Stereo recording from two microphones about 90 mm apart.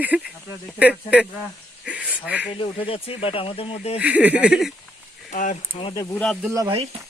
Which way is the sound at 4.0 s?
15° right (ahead or behind).